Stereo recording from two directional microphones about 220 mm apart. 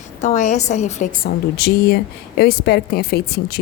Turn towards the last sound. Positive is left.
turn(degrees=45)  # may be behind; listen again after turning